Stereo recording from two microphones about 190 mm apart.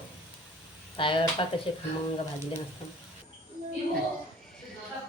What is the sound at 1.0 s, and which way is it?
Speech, 25° left (ahead or behind).